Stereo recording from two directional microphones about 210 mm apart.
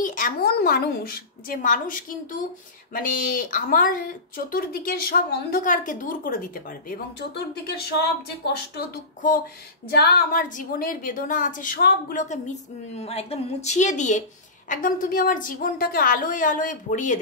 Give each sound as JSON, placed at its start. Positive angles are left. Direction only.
{"t": 0.0, "sound": "a woman's voice", "side_deg": 40}